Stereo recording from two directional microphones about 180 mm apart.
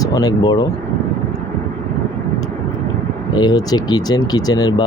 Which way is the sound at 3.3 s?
25° left (ahead or behind).